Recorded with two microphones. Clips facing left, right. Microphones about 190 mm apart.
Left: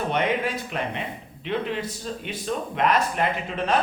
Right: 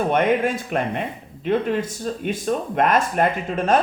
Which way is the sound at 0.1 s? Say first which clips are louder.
Right 5 dB; 50° right (ahead or behind).